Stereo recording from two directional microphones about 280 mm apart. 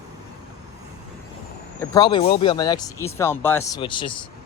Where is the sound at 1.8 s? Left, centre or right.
Centre.